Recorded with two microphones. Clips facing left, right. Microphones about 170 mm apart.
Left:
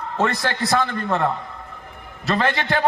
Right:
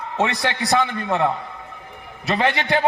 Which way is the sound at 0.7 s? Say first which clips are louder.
Right 1 dB; 20° right (ahead or behind).